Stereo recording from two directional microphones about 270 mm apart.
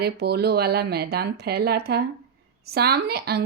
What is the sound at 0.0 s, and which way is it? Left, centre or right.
A woman's voice, right.